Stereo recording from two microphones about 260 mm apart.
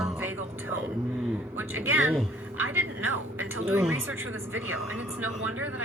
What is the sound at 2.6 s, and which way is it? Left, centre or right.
Speech, right.